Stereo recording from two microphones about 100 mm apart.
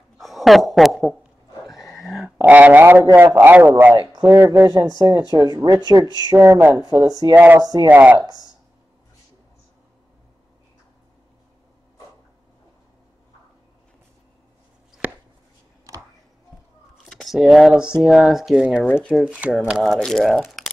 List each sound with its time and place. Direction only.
0.2 s a sound: centre (ahead or behind)
2.4 s a man's voice: 15° right (ahead or behind)
4.6 s speech: 40° right (ahead or behind)
6.3 s speech: 25° right (ahead or behind)
7.3 s a man's voice: 20° right (ahead or behind)
7.6 s speech: 40° right (ahead or behind)
7.9 s speech: 15° right (ahead or behind)
15.0 s a sound: 15° right (ahead or behind)
17.0 s speech: centre (ahead or behind)
20.6 s a sound: centre (ahead or behind)